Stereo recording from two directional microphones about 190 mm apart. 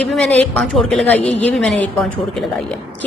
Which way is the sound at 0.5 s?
5° left (ahead or behind).